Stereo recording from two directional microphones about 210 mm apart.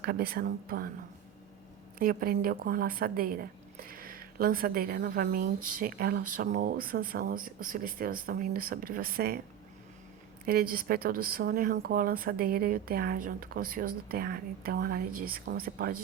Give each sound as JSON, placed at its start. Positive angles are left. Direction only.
{"t": 0.0, "sound": "speech", "side_deg": -45}
{"t": 2.0, "sound": "speech", "side_deg": -45}
{"t": 10.4, "sound": "speech", "side_deg": -45}